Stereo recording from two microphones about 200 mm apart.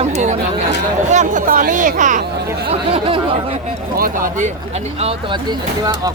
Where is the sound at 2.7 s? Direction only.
30° right (ahead or behind).